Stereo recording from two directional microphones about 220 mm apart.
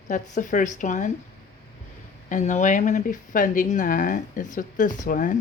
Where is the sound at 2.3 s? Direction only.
35° left (ahead or behind).